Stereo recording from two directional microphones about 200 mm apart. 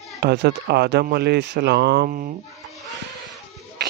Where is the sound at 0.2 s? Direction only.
55° right (ahead or behind).